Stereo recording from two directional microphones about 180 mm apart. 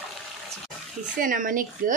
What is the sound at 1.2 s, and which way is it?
Speech, 50° right (ahead or behind).